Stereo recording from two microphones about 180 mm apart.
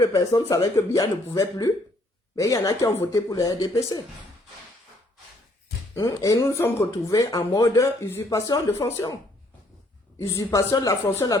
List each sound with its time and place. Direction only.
0.0 s speech: 20° left (ahead or behind)
5.9 s speech: 20° left (ahead or behind)
10.2 s speech: 15° left (ahead or behind)